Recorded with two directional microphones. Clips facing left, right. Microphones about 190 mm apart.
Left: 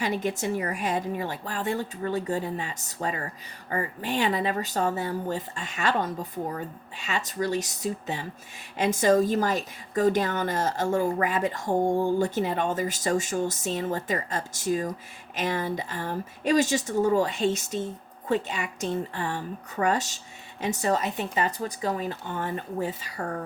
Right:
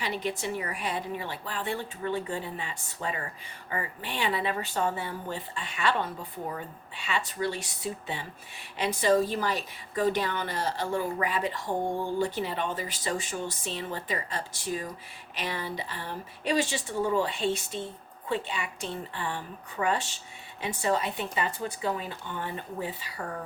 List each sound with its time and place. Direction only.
0.0 s a woman's voice: 45° left (ahead or behind)